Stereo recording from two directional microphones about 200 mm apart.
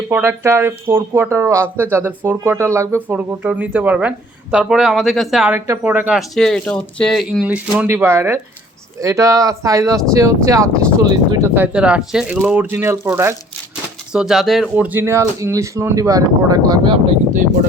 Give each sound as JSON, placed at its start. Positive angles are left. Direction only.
{"t": 0.1, "sound": "speech", "side_deg": -10}
{"t": 14.1, "sound": "speech", "side_deg": -5}